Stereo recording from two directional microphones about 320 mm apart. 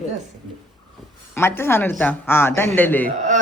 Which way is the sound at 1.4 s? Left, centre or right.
Centre.